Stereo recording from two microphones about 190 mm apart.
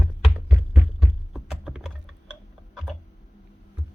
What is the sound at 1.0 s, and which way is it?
Typing, centre (ahead or behind).